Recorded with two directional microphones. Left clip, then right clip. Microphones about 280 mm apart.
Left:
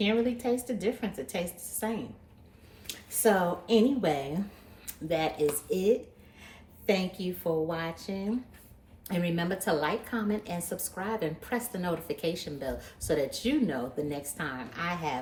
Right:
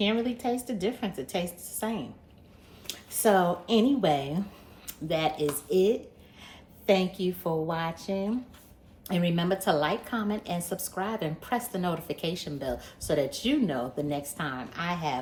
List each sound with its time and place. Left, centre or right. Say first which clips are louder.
0.0 s a woman's voice: even; centre